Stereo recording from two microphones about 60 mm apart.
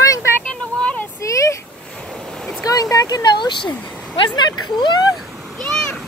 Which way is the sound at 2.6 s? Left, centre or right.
Left.